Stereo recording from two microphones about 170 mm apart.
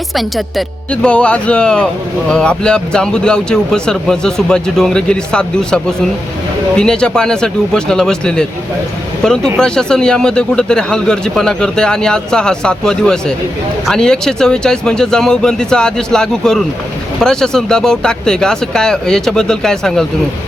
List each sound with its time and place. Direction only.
0.1 s speech: centre (ahead or behind)